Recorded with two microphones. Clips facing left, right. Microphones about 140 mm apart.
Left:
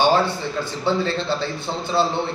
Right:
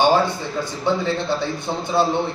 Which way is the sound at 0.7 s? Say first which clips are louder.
Right 1 dB; 15° right (ahead or behind).